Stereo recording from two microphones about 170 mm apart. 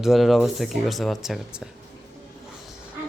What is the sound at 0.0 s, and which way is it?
Speech, centre (ahead or behind).